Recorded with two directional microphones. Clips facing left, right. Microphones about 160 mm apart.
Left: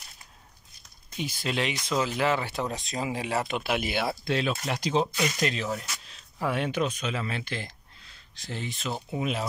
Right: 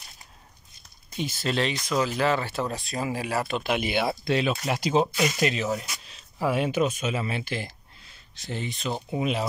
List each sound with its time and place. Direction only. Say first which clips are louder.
1.1 s speech: right 3 dB; 10° left (ahead or behind)
3.6 s speech: right 3 dB; centre (ahead or behind)